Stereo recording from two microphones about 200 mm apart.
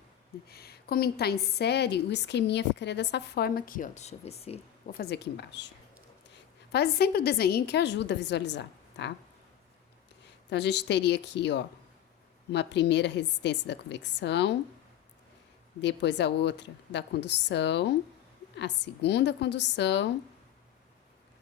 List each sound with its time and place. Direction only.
0.4 s a woman's voice: 50° left (ahead or behind); by 4.6 s 30° left (ahead or behind)
4.9 s a woman's voice: 50° left (ahead or behind)
10.5 s a woman's voice: 60° left (ahead or behind)
15.8 s a woman's voice: 60° left (ahead or behind)